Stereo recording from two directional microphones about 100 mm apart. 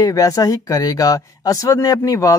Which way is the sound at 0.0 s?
35° left (ahead or behind).